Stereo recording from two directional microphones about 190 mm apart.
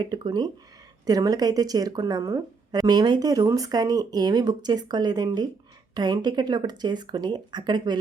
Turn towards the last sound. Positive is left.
turn(degrees=-20)  # may be behind; listen again after turning